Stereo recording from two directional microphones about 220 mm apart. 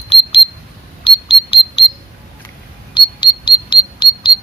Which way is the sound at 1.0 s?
25° left (ahead or behind).